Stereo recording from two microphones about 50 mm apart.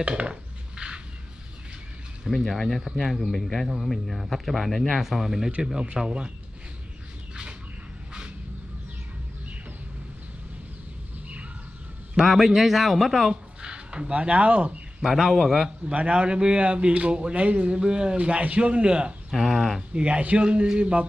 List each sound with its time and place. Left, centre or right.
0.0 s dishes: right
2.2 s speech: centre
5.9 s speech: centre
12.2 s speech: centre
13.3 s speech: centre
15.0 s speech: centre
15.9 s a man's voice: right
19.3 s speech: centre
19.9 s a man's voice: right